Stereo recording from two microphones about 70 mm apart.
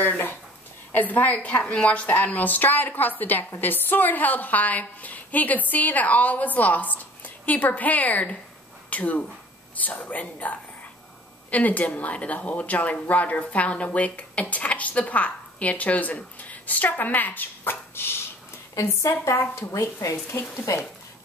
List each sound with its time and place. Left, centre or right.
0.0 s a woman's voice: left